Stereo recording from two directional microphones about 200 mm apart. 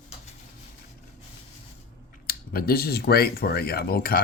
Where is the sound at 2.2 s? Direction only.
50° left (ahead or behind).